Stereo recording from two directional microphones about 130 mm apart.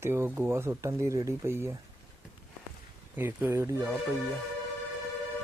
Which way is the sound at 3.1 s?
15° right (ahead or behind).